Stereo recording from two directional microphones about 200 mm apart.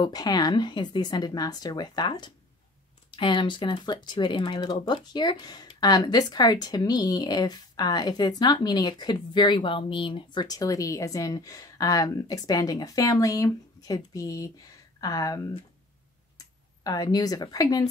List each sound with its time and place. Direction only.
0.0 s speech: 20° left (ahead or behind)
16.8 s speech: 20° left (ahead or behind)